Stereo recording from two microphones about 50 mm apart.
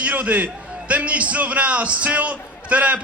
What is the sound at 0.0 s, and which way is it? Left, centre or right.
A man's voice, right.